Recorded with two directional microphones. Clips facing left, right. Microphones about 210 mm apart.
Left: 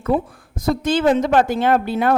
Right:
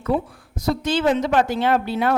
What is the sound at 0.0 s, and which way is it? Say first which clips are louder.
A woman's voice: left 2 dB; 50° left (ahead or behind).